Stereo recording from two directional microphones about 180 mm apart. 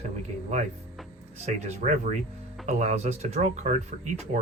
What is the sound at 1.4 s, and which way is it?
Speech, 40° right (ahead or behind).